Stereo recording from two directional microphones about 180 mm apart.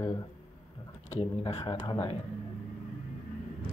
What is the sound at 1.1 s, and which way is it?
Speech, 30° left (ahead or behind).